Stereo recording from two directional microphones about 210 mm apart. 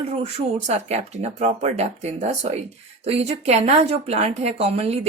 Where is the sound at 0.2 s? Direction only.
30° right (ahead or behind).